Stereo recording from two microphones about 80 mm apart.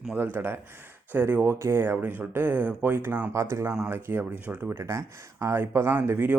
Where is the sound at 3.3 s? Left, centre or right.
Right.